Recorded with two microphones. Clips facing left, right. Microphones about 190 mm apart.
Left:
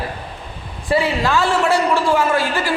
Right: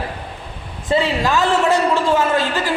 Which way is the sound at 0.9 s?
20° right (ahead or behind).